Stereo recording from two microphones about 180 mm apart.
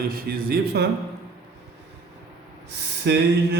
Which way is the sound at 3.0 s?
70° right (ahead or behind).